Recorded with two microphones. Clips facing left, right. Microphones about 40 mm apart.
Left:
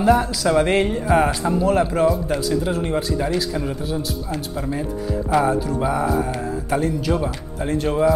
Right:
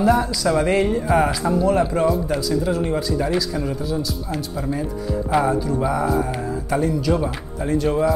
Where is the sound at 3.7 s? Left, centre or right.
Left.